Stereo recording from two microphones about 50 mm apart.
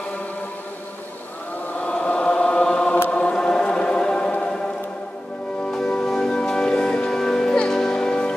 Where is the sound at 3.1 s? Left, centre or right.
Centre.